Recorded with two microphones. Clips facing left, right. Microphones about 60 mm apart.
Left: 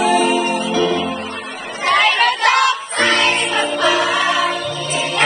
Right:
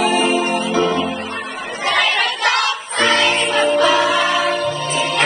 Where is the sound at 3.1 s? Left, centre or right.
Left.